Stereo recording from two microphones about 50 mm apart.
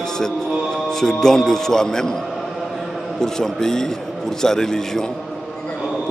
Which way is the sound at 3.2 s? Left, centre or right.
Centre.